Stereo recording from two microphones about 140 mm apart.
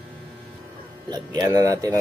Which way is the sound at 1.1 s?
30° right (ahead or behind).